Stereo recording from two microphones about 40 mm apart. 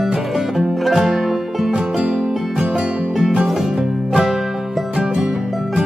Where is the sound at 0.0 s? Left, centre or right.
Centre; by 3.4 s right.